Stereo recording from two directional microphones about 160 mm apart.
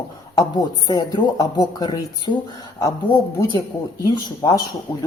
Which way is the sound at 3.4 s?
25° left (ahead or behind).